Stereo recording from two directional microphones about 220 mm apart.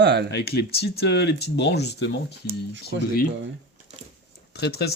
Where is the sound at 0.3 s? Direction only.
50° left (ahead or behind).